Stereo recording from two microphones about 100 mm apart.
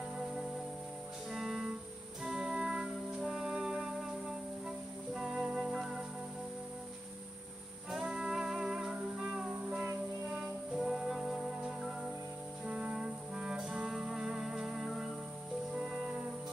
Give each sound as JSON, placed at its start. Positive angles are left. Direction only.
{"t": 1.3, "sound": "music", "side_deg": -5}
{"t": 7.9, "sound": "music", "side_deg": -5}
{"t": 12.6, "sound": "brass instrument", "side_deg": -5}
{"t": 15.7, "sound": "music", "side_deg": -5}